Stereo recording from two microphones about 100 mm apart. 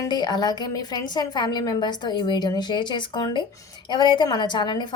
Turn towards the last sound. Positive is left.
turn(degrees=50)  # may be behind; listen again after turning